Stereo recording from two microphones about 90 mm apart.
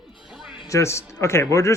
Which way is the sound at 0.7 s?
35° left (ahead or behind).